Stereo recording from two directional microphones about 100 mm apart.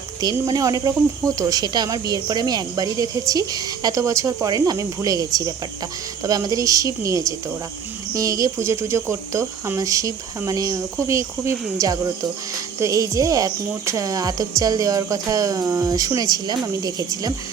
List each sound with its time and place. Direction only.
0.4 s a woman's voice: 40° right (ahead or behind)